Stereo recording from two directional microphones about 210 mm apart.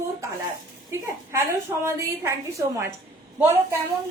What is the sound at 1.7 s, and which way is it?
Speech, 15° right (ahead or behind).